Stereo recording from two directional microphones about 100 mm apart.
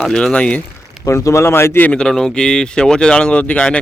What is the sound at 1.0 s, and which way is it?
Speech, 30° left (ahead or behind).